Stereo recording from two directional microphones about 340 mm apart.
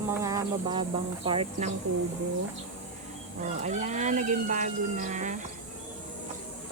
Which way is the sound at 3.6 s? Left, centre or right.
Centre.